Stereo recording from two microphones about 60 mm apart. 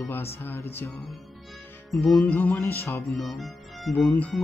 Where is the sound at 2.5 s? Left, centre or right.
Left.